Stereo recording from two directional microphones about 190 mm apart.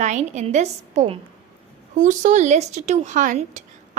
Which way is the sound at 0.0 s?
35° right (ahead or behind).